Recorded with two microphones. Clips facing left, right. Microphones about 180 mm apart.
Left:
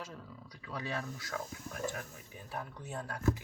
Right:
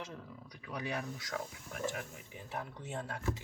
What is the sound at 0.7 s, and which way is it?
Speech, 15° right (ahead or behind).